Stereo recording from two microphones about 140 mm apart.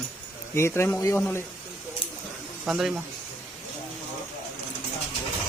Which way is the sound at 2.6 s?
5° right (ahead or behind).